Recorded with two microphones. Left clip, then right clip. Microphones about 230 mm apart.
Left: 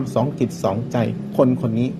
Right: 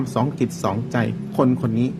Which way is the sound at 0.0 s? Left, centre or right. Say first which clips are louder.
Left 2 dB; centre.